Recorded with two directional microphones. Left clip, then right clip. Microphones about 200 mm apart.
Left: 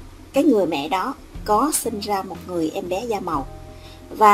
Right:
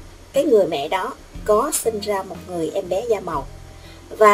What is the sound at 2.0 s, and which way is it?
A woman's voice, 35° left (ahead or behind).